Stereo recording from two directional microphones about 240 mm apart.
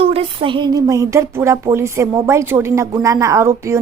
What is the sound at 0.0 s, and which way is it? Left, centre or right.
Speech, right.